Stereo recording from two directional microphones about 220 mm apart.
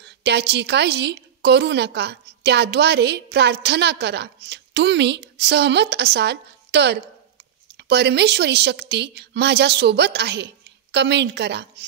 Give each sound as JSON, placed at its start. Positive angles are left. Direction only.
{"t": 0.0, "sound": "a woman's voice", "side_deg": -50}